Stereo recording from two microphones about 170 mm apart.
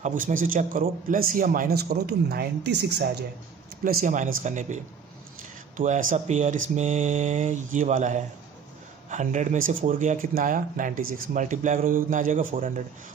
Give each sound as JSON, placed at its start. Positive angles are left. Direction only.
{"t": 0.0, "sound": "a man's voice", "side_deg": -50}
{"t": 3.8, "sound": "speech", "side_deg": -55}